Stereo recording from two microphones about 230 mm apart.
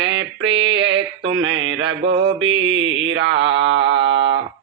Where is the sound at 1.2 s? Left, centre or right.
Right.